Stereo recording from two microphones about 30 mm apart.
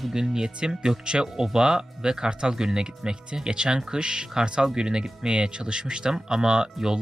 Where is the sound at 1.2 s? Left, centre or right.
Centre.